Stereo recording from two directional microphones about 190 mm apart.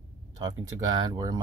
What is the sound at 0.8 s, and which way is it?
Speech, 20° right (ahead or behind).